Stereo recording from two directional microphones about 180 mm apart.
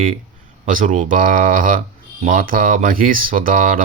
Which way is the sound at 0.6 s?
45° right (ahead or behind).